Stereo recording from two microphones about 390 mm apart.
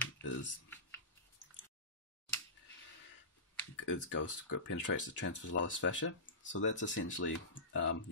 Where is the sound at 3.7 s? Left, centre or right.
Left.